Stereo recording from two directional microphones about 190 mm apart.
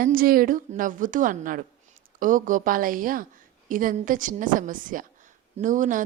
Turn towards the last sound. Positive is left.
turn(degrees=-45)  # may be behind; listen again after turning